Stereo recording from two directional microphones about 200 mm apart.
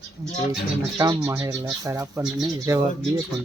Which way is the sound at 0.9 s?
15° right (ahead or behind).